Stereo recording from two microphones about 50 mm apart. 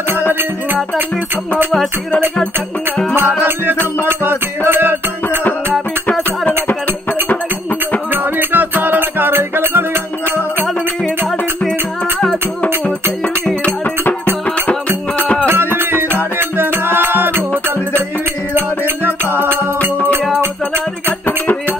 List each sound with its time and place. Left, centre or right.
3.2 s music: right
8.1 s music: right
15.4 s music: right
19.0 s music: right
21.3 s music: left